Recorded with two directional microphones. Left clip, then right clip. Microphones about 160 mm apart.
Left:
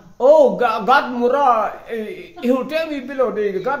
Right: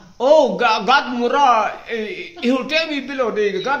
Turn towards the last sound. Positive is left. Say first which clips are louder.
# even
turn(degrees=25)  # may be behind; listen again after turning